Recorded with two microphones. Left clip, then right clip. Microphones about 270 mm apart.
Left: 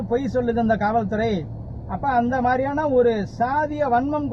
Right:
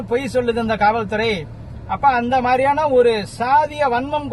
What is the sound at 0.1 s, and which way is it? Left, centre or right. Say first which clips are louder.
Speech: right 4 dB; right.